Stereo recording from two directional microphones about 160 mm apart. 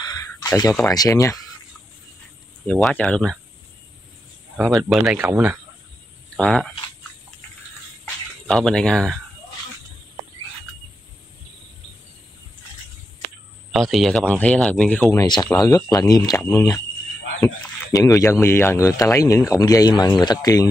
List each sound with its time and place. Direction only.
0.8 s speech: 20° left (ahead or behind)
2.6 s speech: 10° left (ahead or behind)
4.6 s speech: centre (ahead or behind)
6.3 s speech: 5° left (ahead or behind)
8.0 s a sound: 5° left (ahead or behind)
13.7 s speech: centre (ahead or behind)
15.0 s speech: 25° left (ahead or behind)
17.4 s speech: 5° left (ahead or behind)
17.9 s speech: 20° left (ahead or behind)